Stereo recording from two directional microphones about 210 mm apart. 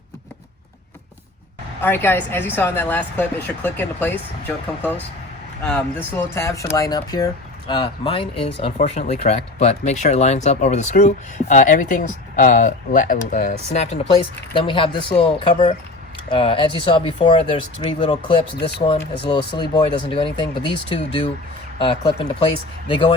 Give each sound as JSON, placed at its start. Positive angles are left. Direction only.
{"t": 1.8, "sound": "speech", "side_deg": 10}
{"t": 6.1, "sound": "speech", "side_deg": 15}